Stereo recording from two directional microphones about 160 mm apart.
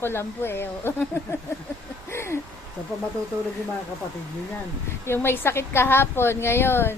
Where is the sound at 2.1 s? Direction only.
15° left (ahead or behind).